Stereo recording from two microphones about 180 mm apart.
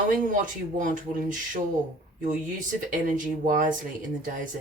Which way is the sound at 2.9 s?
50° right (ahead or behind).